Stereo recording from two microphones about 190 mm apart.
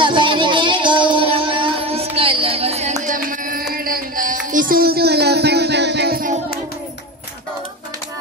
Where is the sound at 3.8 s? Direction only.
50° right (ahead or behind).